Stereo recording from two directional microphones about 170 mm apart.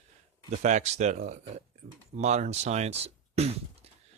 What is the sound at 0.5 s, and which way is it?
Speech, 45° right (ahead or behind).